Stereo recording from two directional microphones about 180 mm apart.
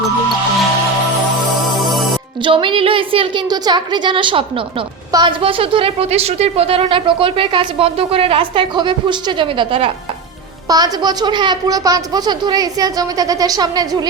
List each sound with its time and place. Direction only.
1.7 s music: centre (ahead or behind)
2.4 s a woman's voice: 25° right (ahead or behind)